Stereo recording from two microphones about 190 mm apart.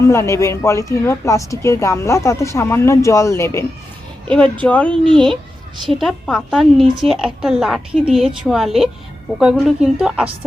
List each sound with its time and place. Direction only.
0.0 s a woman's voice: 15° left (ahead or behind); by 10.2 s 5° right (ahead or behind)